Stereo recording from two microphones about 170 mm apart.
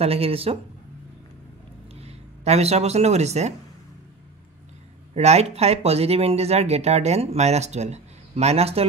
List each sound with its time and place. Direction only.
0.0 s speech: 35° right (ahead or behind)
2.0 s speech: 40° right (ahead or behind)
5.1 s speech: 40° right (ahead or behind)